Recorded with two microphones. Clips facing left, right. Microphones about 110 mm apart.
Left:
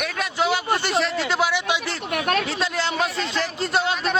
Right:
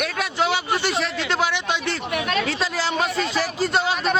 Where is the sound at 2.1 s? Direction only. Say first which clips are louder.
Left 2 dB; 50° left (ahead or behind).